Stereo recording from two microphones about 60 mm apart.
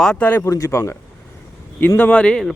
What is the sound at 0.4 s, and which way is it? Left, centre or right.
Speech, left.